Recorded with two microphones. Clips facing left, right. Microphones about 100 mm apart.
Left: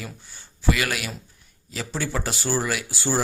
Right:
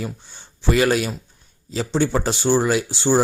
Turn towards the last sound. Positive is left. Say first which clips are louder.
# right 7 dB
turn(degrees=-25)  # may be behind; listen again after turning